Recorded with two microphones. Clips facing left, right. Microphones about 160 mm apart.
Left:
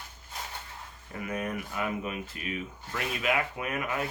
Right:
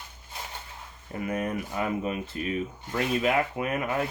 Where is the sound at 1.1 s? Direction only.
25° right (ahead or behind).